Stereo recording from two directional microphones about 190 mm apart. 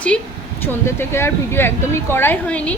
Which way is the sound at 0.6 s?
10° left (ahead or behind).